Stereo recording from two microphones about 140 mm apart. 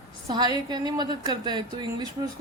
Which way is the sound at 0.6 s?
30° right (ahead or behind).